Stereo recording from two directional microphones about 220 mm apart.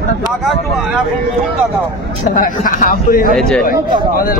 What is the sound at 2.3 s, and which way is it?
Speech, 40° left (ahead or behind).